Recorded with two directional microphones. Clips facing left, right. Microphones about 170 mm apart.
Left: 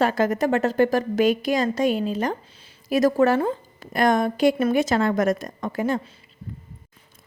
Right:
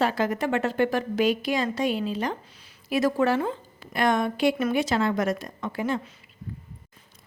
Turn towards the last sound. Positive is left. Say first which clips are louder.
# left 3 dB
turn(degrees=45)  # may be behind; listen again after turning